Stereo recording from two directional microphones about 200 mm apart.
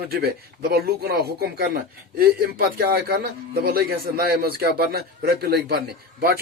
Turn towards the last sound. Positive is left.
turn(degrees=-50)  # may be behind; listen again after turning